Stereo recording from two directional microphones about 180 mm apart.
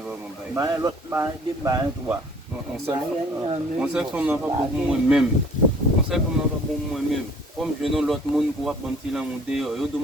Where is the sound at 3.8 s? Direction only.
5° right (ahead or behind).